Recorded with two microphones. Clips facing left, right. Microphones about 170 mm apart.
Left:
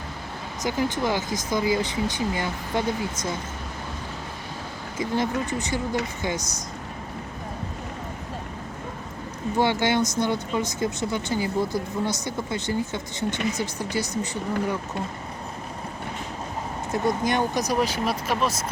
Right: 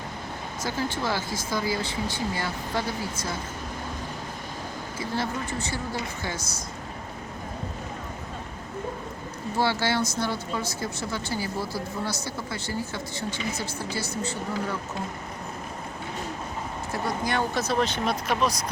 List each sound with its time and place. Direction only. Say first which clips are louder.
0.6 s speech: left 4 dB; 15° left (ahead or behind)
4.9 s speech: left 5 dB; 20° left (ahead or behind)
9.6 s speech: left 3 dB; 20° left (ahead or behind)
16.9 s speech: left 5 dB; 20° left (ahead or behind); by 18.5 s 5° left (ahead or behind)